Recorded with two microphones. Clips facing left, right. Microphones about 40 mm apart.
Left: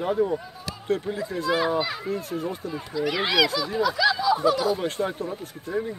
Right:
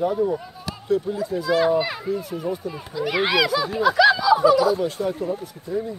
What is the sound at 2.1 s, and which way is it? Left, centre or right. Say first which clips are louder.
Speech: right 2 dB; left.